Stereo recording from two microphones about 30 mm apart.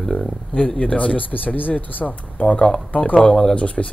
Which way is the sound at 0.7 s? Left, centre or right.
Left.